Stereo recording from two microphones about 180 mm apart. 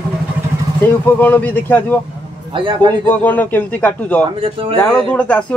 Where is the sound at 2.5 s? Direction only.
25° right (ahead or behind).